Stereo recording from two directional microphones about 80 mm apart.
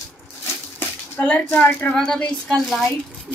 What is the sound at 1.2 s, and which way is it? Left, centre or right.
Speech, centre.